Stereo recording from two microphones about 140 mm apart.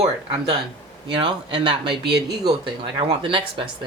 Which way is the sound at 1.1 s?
35° right (ahead or behind).